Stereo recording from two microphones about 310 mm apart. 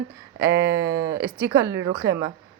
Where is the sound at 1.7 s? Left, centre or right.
Right.